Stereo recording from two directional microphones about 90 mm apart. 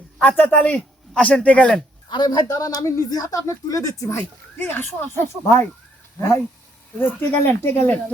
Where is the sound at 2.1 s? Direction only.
55° left (ahead or behind).